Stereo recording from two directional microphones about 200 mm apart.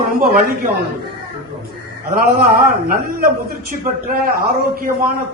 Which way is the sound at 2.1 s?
45° right (ahead or behind).